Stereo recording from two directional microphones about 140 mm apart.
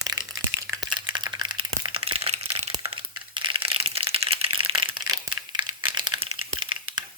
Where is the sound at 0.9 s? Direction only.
30° right (ahead or behind); by 2.6 s 45° right (ahead or behind).